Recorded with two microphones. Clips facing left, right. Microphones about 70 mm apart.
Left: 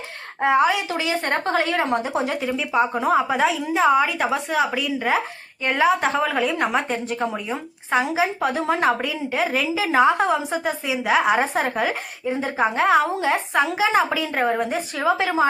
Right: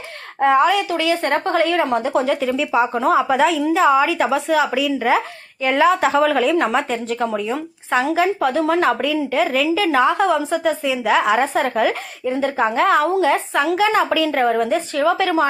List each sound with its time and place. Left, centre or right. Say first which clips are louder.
0.3 s a woman's voice: right 4 dB; centre
1.7 s a woman's voice: right 3 dB; left
2.3 s a woman's voice: right 4 dB; centre; by 10.8 s left
10.8 s a woman's voice: even; centre